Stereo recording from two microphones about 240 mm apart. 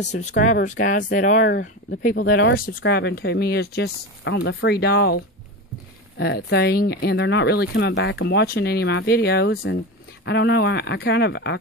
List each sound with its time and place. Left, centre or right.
0.0 s speech: left